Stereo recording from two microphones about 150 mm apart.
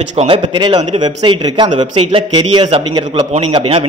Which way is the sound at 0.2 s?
35° right (ahead or behind).